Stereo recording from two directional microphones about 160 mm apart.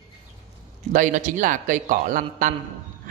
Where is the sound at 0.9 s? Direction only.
50° right (ahead or behind).